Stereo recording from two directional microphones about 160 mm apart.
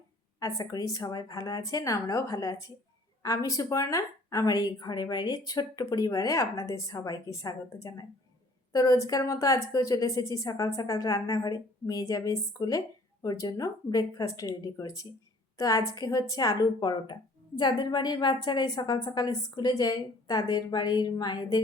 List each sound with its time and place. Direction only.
0.3 s speech: 20° left (ahead or behind)